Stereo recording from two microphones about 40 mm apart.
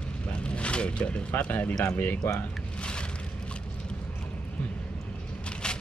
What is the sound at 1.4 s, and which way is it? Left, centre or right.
Speech, left.